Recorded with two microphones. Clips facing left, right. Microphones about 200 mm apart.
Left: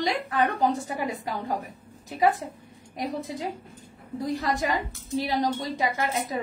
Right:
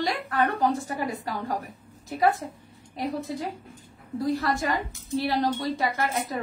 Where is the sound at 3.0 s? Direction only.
15° left (ahead or behind).